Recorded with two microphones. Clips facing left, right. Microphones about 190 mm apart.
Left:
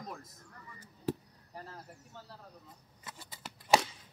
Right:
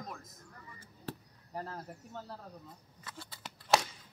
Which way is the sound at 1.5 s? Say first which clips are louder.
Right 6 dB; 60° right (ahead or behind).